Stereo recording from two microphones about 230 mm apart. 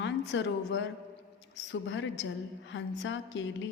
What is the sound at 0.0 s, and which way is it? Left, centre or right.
A woman's voice, left.